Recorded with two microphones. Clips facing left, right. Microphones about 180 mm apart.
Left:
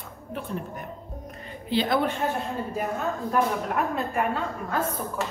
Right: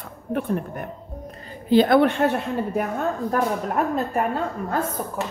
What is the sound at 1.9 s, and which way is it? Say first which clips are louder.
Speech: right 7 dB; 70° right (ahead or behind).